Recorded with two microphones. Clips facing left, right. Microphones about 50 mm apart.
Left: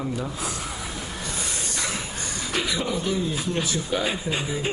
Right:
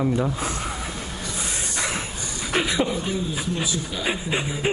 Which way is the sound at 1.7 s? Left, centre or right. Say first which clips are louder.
Right 4 dB; right.